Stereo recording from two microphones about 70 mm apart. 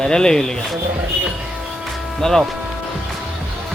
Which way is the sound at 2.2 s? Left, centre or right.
Centre.